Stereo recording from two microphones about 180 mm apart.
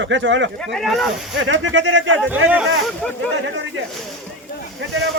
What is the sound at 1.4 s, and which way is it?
Speech, 90° right.